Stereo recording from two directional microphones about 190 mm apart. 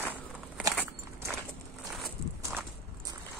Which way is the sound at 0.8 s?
5° left (ahead or behind).